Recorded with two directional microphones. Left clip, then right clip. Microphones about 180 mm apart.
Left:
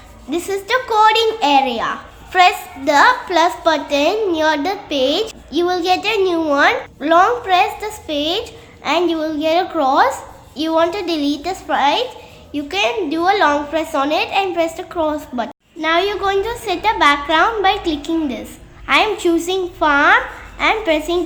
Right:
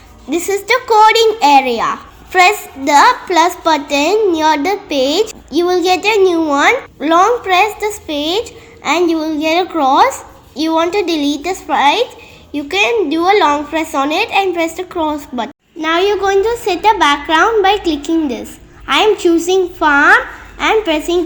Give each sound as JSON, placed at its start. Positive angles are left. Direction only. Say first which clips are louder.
{"t": 0.3, "sound": "a woman's voice", "louder": "right 5 dB", "side_deg": -20}